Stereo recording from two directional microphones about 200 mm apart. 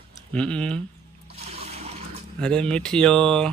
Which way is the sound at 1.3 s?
30° right (ahead or behind).